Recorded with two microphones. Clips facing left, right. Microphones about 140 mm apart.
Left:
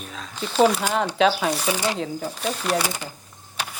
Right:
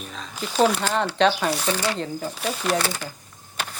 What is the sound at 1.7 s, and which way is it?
Speech, 15° left (ahead or behind).